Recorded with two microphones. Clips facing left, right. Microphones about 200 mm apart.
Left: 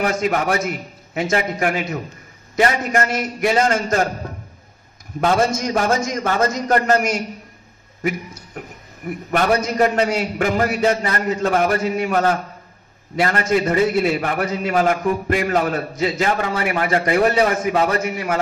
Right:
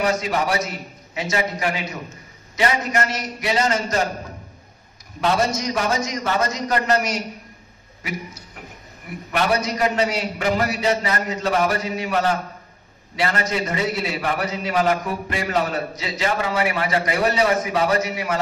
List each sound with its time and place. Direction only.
0.0 s a man's voice: 50° left (ahead or behind)
5.2 s a man's voice: 50° left (ahead or behind)
9.3 s a man's voice: 50° left (ahead or behind)